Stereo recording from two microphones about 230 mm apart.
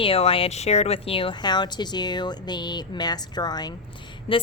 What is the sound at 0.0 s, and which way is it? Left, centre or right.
A woman's voice, left.